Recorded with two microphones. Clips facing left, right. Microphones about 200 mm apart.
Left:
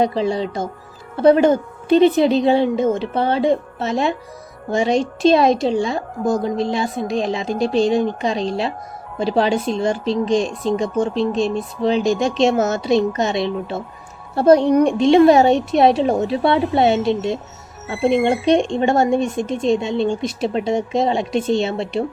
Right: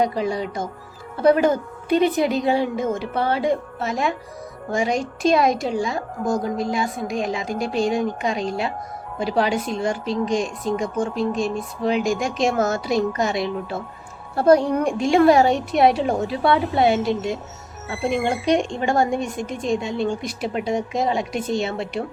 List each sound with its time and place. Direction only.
0.0 s speech: 30° left (ahead or behind)